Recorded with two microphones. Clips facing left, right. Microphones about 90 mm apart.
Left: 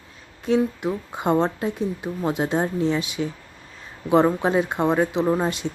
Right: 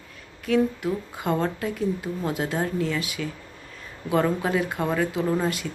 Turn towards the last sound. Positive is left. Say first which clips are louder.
# left 3 dB
turn(degrees=25)  # may be behind; listen again after turning